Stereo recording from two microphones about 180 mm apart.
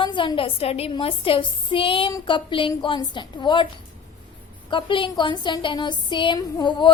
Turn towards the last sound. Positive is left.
turn(degrees=25)  # may be behind; listen again after turning